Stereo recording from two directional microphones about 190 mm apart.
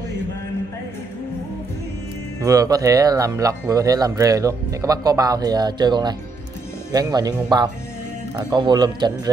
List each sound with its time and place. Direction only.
2.4 s speech: 20° right (ahead or behind)